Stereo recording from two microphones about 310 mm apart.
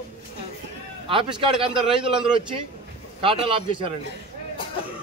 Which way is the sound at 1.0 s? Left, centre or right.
Centre.